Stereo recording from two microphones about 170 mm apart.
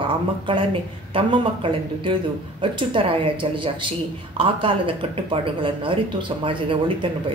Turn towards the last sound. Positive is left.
turn(degrees=-30)  # may be behind; listen again after turning